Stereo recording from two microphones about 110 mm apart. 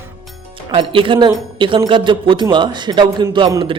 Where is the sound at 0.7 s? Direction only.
55° right (ahead or behind).